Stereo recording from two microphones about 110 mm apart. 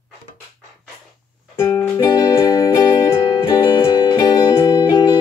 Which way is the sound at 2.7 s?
45° left (ahead or behind).